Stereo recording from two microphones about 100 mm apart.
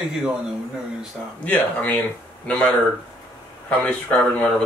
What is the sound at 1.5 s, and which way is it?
Speech, 15° left (ahead or behind).